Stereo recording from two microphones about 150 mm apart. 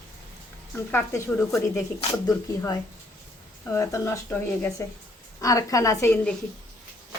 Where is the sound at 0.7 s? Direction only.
15° left (ahead or behind).